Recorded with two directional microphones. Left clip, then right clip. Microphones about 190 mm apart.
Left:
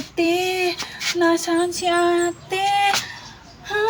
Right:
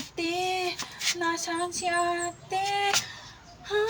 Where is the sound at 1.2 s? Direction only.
15° left (ahead or behind).